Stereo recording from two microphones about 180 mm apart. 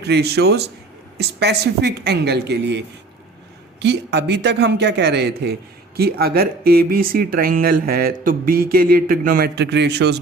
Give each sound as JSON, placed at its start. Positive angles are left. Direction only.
{"t": 0.0, "sound": "a man's voice", "side_deg": -65}